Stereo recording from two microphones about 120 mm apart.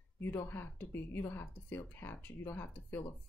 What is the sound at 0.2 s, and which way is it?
A woman's voice, 20° left (ahead or behind).